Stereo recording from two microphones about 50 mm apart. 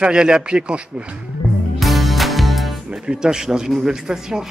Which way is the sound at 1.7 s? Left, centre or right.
Centre.